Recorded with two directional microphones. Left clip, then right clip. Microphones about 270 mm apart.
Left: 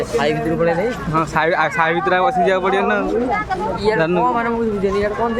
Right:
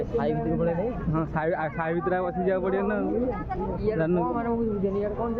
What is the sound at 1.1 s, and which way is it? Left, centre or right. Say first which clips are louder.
Speech: left 12 dB; centre.